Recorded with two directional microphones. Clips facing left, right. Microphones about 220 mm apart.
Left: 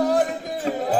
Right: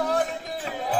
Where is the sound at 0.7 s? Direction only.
40° left (ahead or behind).